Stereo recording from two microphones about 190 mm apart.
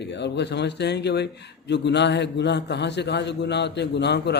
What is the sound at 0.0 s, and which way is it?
Speech, 65° left (ahead or behind).